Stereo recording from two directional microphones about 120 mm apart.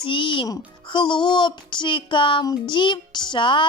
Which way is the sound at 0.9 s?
40° left (ahead or behind).